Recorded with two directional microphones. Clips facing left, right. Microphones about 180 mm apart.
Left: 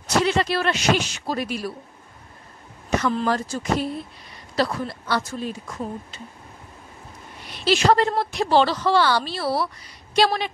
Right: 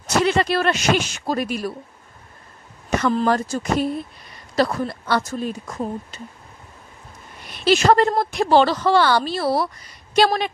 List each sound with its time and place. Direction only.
0.0 s a woman's voice: 55° right (ahead or behind)
3.0 s a woman's voice: 45° right (ahead or behind)
7.4 s a woman's voice: 50° right (ahead or behind)